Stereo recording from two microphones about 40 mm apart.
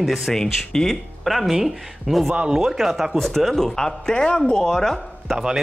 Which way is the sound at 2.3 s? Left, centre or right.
Right.